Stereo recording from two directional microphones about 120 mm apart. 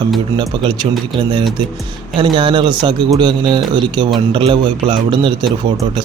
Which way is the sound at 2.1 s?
40° right (ahead or behind).